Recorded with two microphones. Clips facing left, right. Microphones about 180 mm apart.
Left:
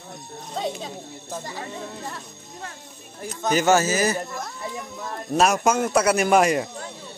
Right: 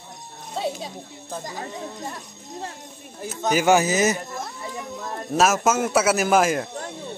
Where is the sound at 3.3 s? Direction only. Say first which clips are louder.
Right 1 dB; 5° right (ahead or behind).